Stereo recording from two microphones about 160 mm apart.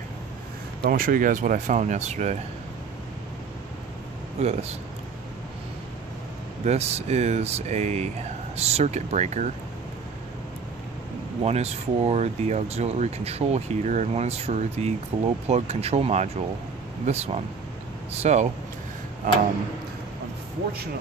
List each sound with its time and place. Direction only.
0.8 s speech: 65° right (ahead or behind); by 2.3 s 45° right (ahead or behind)
4.4 s speech: 40° right (ahead or behind)
6.6 s speech: 40° right (ahead or behind)
11.4 s speech: 40° right (ahead or behind)